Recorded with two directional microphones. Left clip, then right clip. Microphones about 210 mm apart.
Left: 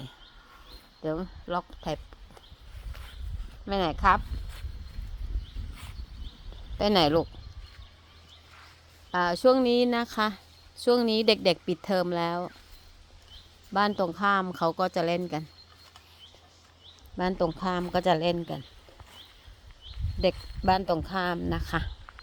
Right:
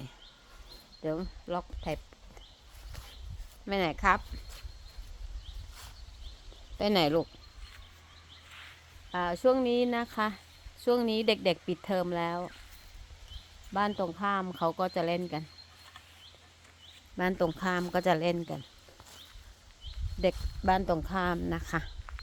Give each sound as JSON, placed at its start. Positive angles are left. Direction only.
{"t": 1.0, "sound": "a woman's voice", "side_deg": 20}
{"t": 3.7, "sound": "speech", "side_deg": 15}
{"t": 6.7, "sound": "speech", "side_deg": 10}
{"t": 9.1, "sound": "a woman's voice", "side_deg": 30}
{"t": 13.7, "sound": "a woman's voice", "side_deg": 30}
{"t": 17.2, "sound": "speech", "side_deg": 10}
{"t": 20.2, "sound": "speech", "side_deg": 15}